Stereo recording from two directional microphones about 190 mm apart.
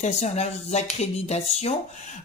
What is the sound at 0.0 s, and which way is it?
Speech, 35° left (ahead or behind).